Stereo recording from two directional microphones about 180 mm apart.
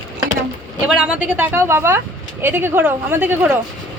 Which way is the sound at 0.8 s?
5° right (ahead or behind).